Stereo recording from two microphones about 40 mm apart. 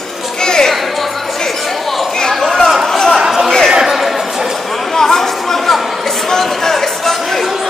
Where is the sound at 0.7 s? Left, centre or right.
Centre.